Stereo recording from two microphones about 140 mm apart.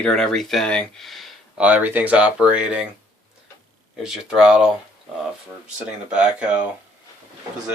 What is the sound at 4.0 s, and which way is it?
Speech, 5° right (ahead or behind).